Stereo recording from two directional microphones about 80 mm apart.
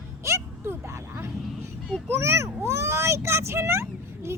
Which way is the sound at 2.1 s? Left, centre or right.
Right.